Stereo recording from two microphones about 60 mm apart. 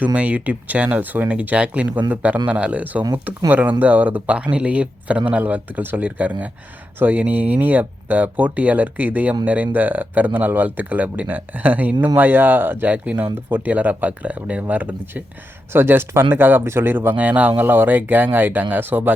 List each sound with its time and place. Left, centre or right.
0.0 s speech: right
15.7 s speech: right